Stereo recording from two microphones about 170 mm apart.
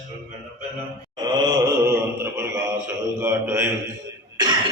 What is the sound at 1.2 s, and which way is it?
Speech, 15° right (ahead or behind).